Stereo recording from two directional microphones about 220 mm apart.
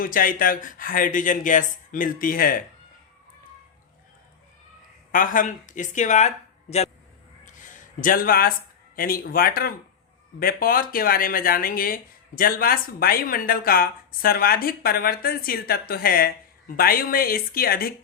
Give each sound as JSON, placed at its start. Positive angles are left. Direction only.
{"t": 0.0, "sound": "speech", "side_deg": 40}
{"t": 5.1, "sound": "speech", "side_deg": 40}
{"t": 7.4, "sound": "a sound", "side_deg": 35}
{"t": 9.0, "sound": "speech", "side_deg": 40}